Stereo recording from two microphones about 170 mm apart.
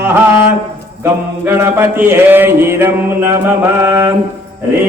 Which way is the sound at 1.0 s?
15° right (ahead or behind).